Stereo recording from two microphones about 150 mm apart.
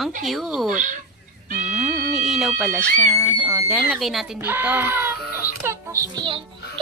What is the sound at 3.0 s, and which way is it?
Speech, 10° right (ahead or behind).